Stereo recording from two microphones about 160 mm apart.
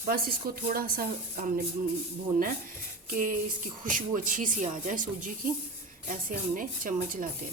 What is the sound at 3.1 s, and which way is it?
Speech, 55° right (ahead or behind).